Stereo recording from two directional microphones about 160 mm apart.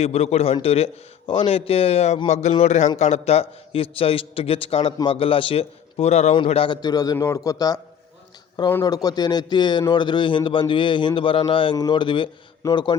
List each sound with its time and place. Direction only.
0.0 s a man's voice: 40° left (ahead or behind); by 7.8 s 25° left (ahead or behind)
8.8 s a man's voice: 25° left (ahead or behind)